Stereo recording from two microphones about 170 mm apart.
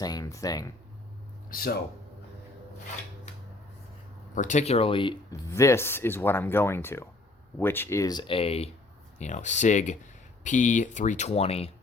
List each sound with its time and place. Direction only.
0.0 s speech: 20° left (ahead or behind)
1.5 s speech: 60° left (ahead or behind)
4.4 s speech: 45° left (ahead or behind)
5.3 s speech: 15° left (ahead or behind); by 11.7 s 35° left (ahead or behind)